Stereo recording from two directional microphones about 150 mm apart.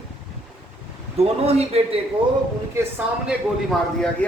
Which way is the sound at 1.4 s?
45° right (ahead or behind).